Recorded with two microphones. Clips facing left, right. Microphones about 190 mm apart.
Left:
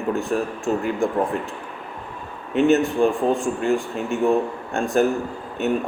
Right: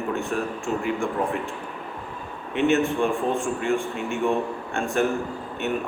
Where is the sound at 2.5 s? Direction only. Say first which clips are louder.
Left 4 dB; 35° left (ahead or behind).